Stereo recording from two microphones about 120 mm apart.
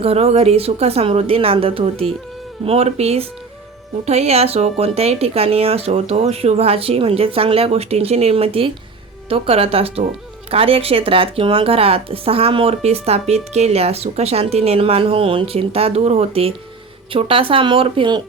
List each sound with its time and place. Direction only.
0.0 s a woman's voice: 60° right (ahead or behind)